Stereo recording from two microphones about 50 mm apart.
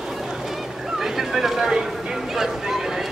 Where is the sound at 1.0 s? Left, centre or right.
Centre.